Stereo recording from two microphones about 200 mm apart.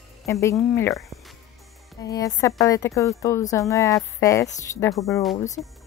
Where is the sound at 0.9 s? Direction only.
Centre (ahead or behind).